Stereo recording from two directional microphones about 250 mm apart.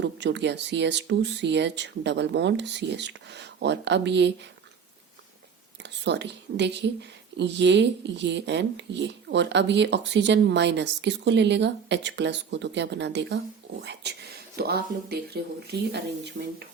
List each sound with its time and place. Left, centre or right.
0.0 s speech: right
5.8 s speech: right